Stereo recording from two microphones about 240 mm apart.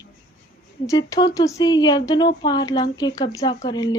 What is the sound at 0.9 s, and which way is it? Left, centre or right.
A woman's voice, centre.